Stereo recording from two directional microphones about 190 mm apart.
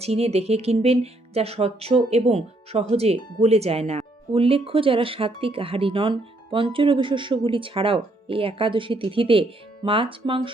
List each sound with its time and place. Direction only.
0.0 s speech: 30° right (ahead or behind)